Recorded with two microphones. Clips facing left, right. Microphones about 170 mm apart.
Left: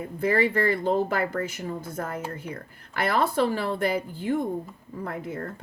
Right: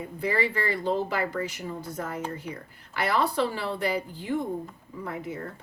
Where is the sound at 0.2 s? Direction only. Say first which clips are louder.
Left 5 dB; 50° left (ahead or behind).